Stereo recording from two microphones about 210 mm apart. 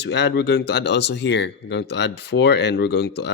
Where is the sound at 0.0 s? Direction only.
55° left (ahead or behind).